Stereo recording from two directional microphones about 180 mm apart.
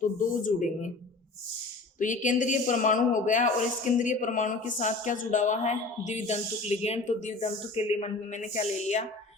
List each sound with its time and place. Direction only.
0.0 s a man's voice: 45° left (ahead or behind)
2.0 s a man's voice: 45° left (ahead or behind)